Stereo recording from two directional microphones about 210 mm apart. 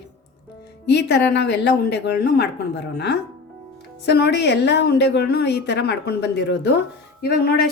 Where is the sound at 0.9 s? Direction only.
55° left (ahead or behind).